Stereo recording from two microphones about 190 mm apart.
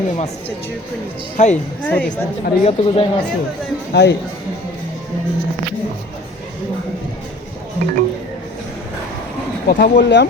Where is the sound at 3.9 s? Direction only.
65° left (ahead or behind).